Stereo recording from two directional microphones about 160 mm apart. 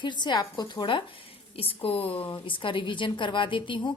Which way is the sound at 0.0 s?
30° left (ahead or behind).